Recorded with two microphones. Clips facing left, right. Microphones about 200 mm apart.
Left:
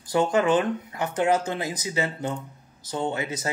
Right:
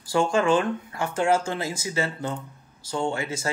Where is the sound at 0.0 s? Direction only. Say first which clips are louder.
Even; 20° left (ahead or behind).